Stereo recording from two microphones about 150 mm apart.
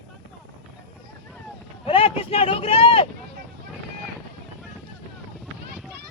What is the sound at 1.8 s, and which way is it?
Speech, 40° left (ahead or behind).